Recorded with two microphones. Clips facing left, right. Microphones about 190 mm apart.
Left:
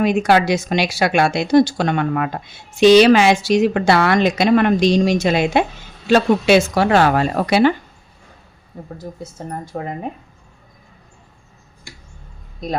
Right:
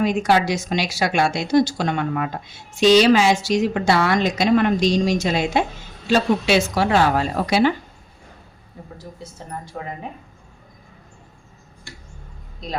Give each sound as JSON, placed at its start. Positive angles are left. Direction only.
{"t": 0.0, "sound": "a woman's voice", "side_deg": 65}
{"t": 8.8, "sound": "a woman's voice", "side_deg": 45}